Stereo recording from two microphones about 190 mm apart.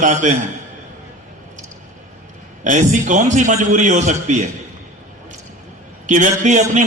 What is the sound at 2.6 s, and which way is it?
A man's voice, 40° right (ahead or behind).